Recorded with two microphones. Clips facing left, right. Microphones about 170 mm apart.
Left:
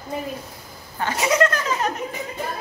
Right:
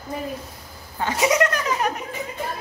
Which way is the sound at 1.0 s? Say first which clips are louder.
Even; 20° right (ahead or behind).